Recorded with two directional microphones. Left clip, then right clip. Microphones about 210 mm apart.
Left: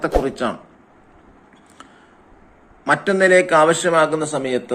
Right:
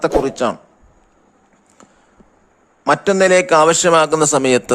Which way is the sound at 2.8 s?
40° right (ahead or behind).